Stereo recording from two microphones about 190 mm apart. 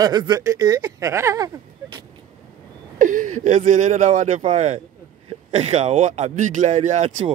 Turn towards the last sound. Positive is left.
turn(degrees=-35)  # may be behind; listen again after turning